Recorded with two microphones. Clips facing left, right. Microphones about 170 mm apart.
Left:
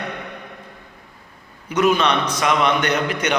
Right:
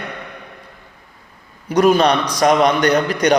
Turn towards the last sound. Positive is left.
turn(degrees=-35)  # may be behind; listen again after turning